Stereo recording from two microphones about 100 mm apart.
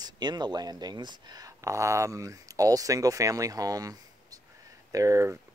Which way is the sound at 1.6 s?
30° right (ahead or behind).